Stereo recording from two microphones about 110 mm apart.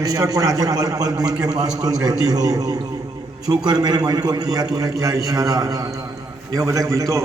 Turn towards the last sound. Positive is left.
turn(degrees=-30)  # may be behind; listen again after turning